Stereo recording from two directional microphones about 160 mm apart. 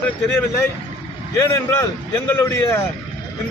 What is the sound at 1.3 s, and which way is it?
Speech, 15° left (ahead or behind).